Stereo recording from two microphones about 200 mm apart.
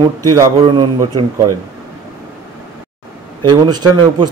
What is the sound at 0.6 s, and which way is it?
Speech, 20° right (ahead or behind).